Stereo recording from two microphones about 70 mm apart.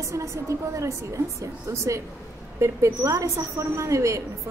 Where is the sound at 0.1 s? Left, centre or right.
Right.